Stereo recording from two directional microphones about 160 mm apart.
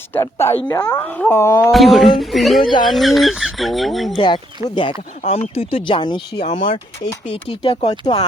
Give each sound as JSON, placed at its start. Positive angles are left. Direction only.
{"t": 0.1, "sound": "speech", "side_deg": 15}
{"t": 0.9, "sound": "speech", "side_deg": 10}
{"t": 1.7, "sound": "speech", "side_deg": 0}
{"t": 4.7, "sound": "speech", "side_deg": 30}